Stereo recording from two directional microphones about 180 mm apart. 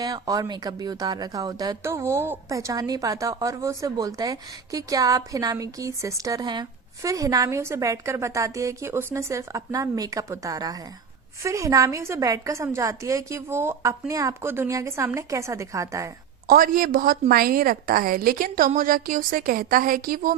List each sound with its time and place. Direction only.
0.0 s a woman's voice: 20° right (ahead or behind)
16.5 s a woman's voice: 50° right (ahead or behind)